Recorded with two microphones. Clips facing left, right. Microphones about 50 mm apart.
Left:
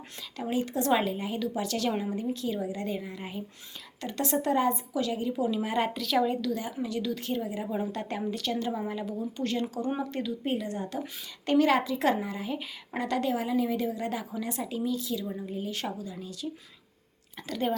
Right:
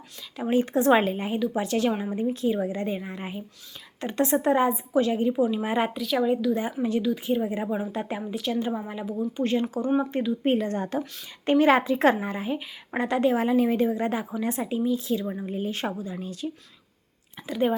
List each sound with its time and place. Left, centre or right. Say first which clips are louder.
0.4 s a woman's voice: right 7 dB; right
1.5 s a woman's voice: right 4 dB; right
5.9 s a woman's voice: right 3 dB; centre
6.5 s speech: right 6 dB; right
7.0 s speech: right 6 dB; centre
7.4 s a woman's voice: right 6 dB; right
7.7 s speech: right 3 dB; centre
9.4 s speech: right 5 dB; right
10.4 s a woman's voice: right 7 dB; right
11.4 s a woman's voice: right 4 dB; right
13.0 s speech: right 6 dB; right
13.3 s a woman's voice: right 6 dB; right
17.4 s speech: right 5 dB; centre